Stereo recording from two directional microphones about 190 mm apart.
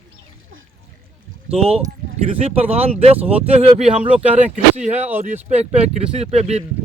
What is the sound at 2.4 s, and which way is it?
Speech, 30° right (ahead or behind).